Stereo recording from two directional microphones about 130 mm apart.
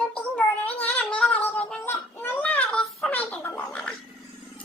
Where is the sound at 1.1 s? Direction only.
10° left (ahead or behind).